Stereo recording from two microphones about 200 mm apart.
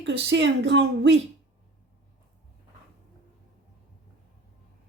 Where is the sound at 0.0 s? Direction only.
60° right (ahead or behind).